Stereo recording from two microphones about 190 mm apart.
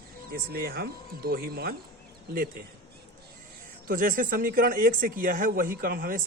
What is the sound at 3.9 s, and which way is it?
Speech, 45° right (ahead or behind).